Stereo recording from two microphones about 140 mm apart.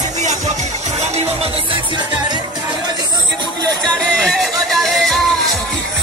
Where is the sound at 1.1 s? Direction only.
50° right (ahead or behind).